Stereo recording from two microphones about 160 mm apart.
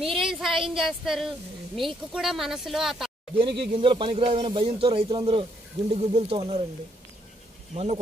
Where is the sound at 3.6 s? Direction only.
35° right (ahead or behind).